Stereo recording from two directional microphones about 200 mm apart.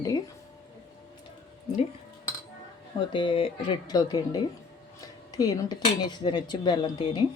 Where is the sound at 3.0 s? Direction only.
25° left (ahead or behind).